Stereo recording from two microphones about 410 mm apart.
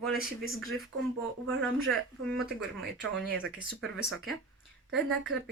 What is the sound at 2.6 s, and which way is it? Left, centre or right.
Speech, right.